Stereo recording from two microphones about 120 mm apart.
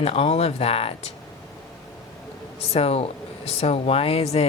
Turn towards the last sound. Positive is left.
turn(degrees=60)  # may be behind; listen again after turning